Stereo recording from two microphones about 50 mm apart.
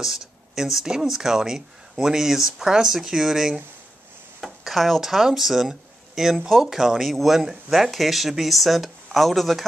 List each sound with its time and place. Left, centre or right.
0.0 s speech: centre